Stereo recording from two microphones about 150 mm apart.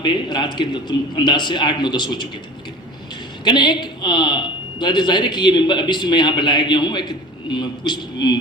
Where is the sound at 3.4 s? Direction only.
30° left (ahead or behind).